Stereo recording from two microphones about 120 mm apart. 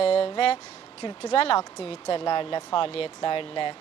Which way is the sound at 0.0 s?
55° left (ahead or behind).